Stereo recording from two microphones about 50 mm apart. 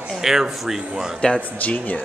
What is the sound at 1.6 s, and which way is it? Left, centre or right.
Speech, left.